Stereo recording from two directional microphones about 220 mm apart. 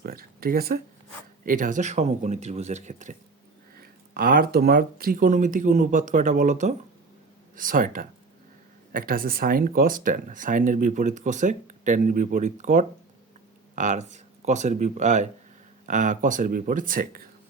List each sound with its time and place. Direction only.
0.0 s speech: 45° right (ahead or behind)